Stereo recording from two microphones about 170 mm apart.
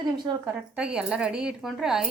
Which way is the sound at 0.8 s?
5° right (ahead or behind).